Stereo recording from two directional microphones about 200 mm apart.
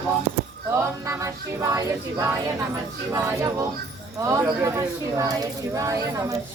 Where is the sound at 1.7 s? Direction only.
15° right (ahead or behind).